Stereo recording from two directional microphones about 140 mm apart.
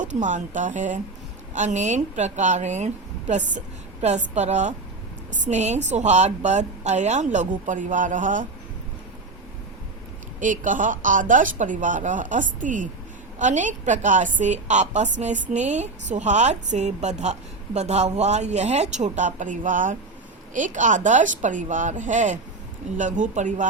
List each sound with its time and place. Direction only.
0.0 s a woman's voice: 60° right (ahead or behind)
10.4 s a woman's voice: 70° right (ahead or behind)